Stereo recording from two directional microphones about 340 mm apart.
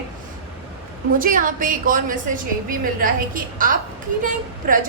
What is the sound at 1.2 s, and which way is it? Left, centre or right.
A woman's voice, right.